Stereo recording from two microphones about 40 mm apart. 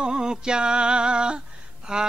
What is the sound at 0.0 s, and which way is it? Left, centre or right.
Music, centre.